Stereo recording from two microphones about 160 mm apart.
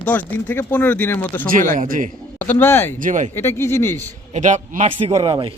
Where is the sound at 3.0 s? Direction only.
50° right (ahead or behind).